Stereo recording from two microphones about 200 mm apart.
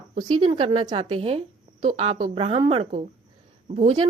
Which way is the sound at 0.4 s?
25° right (ahead or behind).